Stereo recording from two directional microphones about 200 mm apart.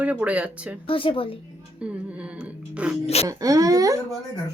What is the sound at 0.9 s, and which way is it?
Speech, 25° left (ahead or behind).